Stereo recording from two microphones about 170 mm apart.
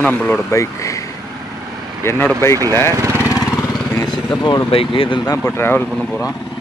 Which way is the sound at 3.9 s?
5° left (ahead or behind).